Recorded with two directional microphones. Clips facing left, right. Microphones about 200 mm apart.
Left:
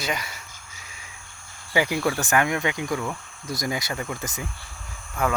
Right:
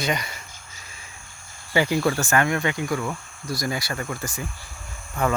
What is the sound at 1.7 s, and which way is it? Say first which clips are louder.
Speech: right 2 dB; 15° left (ahead or behind).